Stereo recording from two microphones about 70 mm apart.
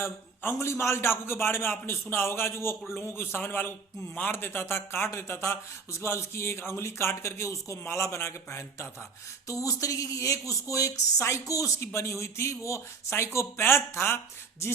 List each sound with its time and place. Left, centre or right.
0.0 s speech: left
9.5 s speech: left